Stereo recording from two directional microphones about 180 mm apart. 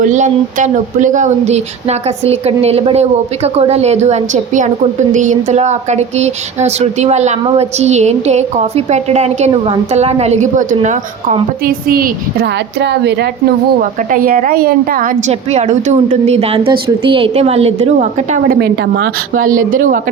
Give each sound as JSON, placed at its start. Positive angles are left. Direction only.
{"t": 0.0, "sound": "speech", "side_deg": -45}
{"t": 11.6, "sound": "a woman's voice", "side_deg": -55}
{"t": 14.1, "sound": "a woman's voice", "side_deg": -50}
{"t": 15.3, "sound": "speech", "side_deg": -35}
{"t": 18.6, "sound": "a woman's voice", "side_deg": -65}